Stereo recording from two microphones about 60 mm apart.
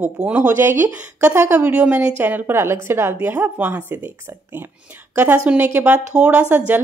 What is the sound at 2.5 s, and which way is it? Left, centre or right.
Speech, right.